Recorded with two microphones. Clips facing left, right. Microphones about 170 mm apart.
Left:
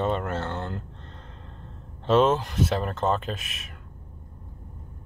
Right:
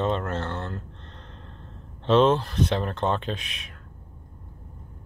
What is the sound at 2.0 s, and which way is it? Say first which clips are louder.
A man's voice: right 1 dB; 5° left (ahead or behind).